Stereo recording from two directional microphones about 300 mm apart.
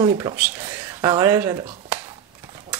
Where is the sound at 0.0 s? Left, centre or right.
Centre.